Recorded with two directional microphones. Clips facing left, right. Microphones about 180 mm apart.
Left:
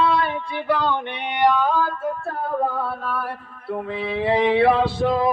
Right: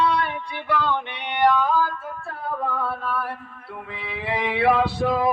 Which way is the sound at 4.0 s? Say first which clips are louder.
Left 7 dB; 35° left (ahead or behind).